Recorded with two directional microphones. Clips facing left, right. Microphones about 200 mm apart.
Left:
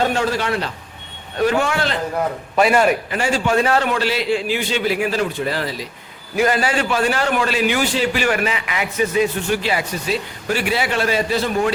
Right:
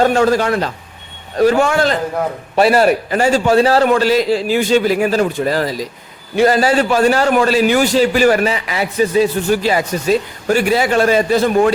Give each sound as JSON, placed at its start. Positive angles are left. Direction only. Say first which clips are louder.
{"t": 0.0, "sound": "a man's voice", "louder": "right 7 dB", "side_deg": -45}